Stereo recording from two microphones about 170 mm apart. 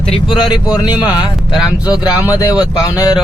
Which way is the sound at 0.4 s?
25° left (ahead or behind).